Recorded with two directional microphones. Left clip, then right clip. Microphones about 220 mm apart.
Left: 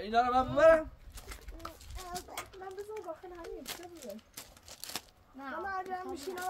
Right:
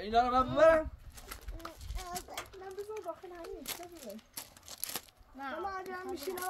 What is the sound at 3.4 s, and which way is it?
Speech, 15° right (ahead or behind).